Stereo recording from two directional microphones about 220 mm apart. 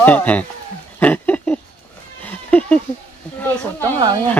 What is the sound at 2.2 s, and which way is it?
Cat, 5° left (ahead or behind).